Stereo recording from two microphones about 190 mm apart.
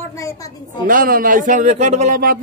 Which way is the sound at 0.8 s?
45° right (ahead or behind).